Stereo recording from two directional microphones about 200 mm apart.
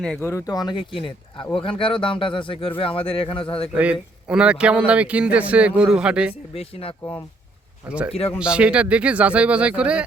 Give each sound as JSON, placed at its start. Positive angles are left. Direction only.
{"t": 0.0, "sound": "speech", "side_deg": 5}
{"t": 4.3, "sound": "speech", "side_deg": -5}
{"t": 6.5, "sound": "speech", "side_deg": 30}
{"t": 7.0, "sound": "speech", "side_deg": 15}
{"t": 7.9, "sound": "speech", "side_deg": -5}